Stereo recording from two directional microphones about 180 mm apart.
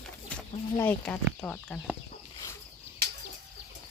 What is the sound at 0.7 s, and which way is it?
Speech, 10° left (ahead or behind).